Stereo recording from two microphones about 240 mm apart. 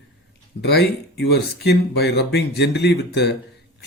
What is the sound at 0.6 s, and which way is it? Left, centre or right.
Speech, left.